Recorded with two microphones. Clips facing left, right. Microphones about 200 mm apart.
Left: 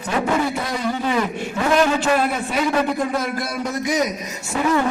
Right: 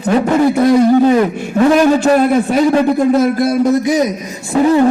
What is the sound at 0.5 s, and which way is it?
A man's voice, 50° right (ahead or behind).